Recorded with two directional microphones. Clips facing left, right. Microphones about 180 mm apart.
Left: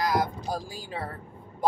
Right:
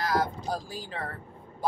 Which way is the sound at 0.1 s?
10° left (ahead or behind).